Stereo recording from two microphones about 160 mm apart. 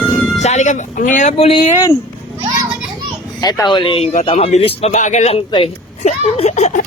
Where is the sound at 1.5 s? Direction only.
30° left (ahead or behind).